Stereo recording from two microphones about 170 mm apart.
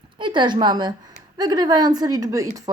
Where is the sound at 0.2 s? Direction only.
25° right (ahead or behind).